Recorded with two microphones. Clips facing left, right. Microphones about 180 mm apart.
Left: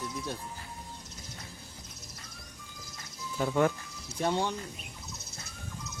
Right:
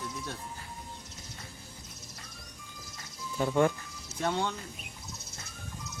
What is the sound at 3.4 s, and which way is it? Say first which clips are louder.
Speech: right 1 dB; 5° right (ahead or behind).